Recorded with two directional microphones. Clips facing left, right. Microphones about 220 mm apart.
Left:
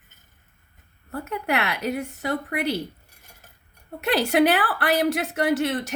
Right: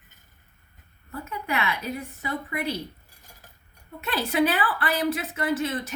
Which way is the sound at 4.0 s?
75° left (ahead or behind).